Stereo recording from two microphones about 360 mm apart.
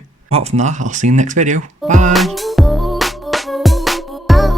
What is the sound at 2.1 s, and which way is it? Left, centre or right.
Music, centre.